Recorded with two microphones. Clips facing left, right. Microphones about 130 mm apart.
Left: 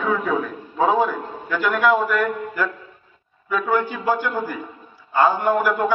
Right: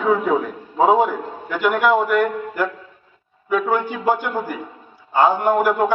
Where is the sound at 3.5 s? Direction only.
15° right (ahead or behind).